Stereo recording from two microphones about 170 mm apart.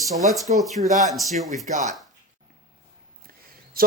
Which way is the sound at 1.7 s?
45° right (ahead or behind).